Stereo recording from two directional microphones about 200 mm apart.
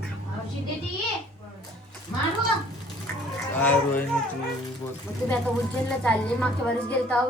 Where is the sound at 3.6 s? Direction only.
10° left (ahead or behind).